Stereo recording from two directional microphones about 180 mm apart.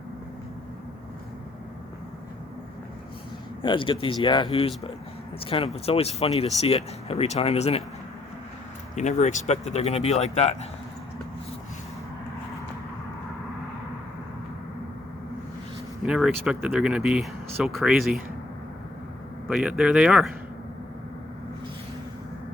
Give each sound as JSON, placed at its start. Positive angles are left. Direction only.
{"t": 3.6, "sound": "speech", "side_deg": 25}
{"t": 9.0, "sound": "speech", "side_deg": 40}
{"t": 16.0, "sound": "speech", "side_deg": -5}
{"t": 19.5, "sound": "speech", "side_deg": -5}